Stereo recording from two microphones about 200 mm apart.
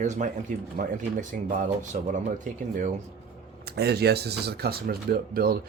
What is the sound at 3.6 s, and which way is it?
Speech, 55° right (ahead or behind).